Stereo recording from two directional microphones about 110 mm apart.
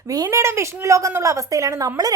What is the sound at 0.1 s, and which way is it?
Speech, 30° right (ahead or behind).